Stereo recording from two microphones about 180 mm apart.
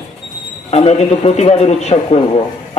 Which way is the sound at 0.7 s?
35° left (ahead or behind).